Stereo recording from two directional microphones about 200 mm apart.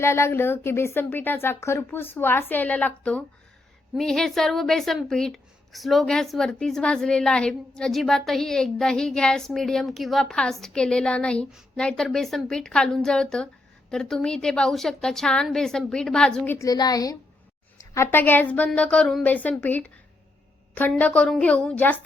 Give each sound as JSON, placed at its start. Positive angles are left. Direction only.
{"t": 0.0, "sound": "a woman's voice", "side_deg": 15}
{"t": 16.6, "sound": "speech", "side_deg": 20}